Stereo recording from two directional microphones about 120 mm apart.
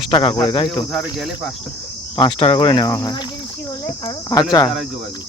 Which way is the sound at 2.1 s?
45° left (ahead or behind).